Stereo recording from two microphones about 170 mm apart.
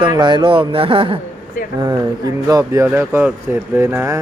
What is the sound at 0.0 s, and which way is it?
Speech, 25° right (ahead or behind).